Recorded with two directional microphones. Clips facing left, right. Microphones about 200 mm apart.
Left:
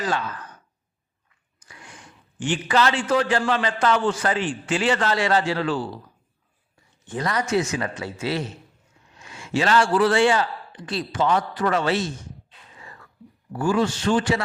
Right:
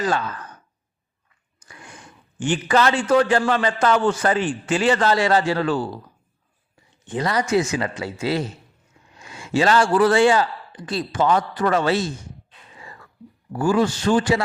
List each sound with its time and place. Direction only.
2.4 s a man's voice: 45° right (ahead or behind)
7.0 s a woman's voice: 15° right (ahead or behind)
7.8 s a man's voice: 30° right (ahead or behind)
13.5 s a man's voice: 40° right (ahead or behind)